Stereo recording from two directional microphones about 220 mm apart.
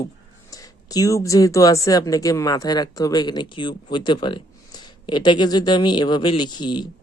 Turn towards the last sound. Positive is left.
turn(degrees=20)  # may be behind; listen again after turning